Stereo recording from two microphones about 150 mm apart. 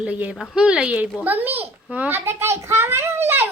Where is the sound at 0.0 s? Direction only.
10° right (ahead or behind).